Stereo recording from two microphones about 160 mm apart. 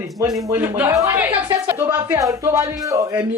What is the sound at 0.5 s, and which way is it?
A man's voice, 10° right (ahead or behind).